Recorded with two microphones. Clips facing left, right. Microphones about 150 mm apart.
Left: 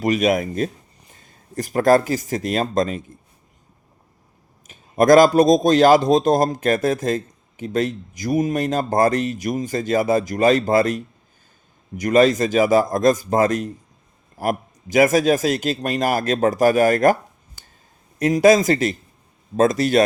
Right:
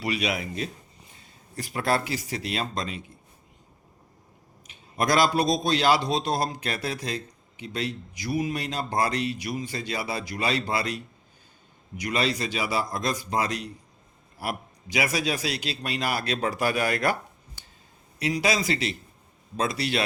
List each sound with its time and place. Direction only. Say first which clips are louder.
0.0 s a man's voice: left 10 dB; 45° left (ahead or behind)
4.6 s a man's voice: left 11 dB; 45° left (ahead or behind)
18.2 s a man's voice: left 12 dB; 45° left (ahead or behind)